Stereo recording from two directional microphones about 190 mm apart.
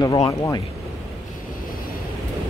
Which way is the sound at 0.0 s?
20° left (ahead or behind).